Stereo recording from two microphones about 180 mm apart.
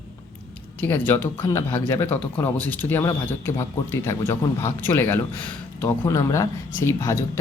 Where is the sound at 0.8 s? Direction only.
10° left (ahead or behind).